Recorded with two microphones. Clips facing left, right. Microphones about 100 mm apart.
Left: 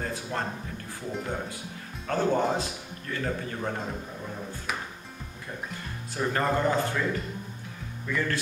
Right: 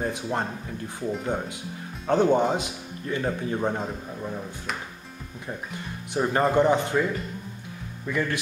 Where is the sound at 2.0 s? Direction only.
20° right (ahead or behind).